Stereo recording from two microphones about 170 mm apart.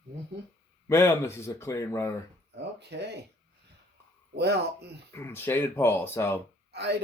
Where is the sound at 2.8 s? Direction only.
80° right.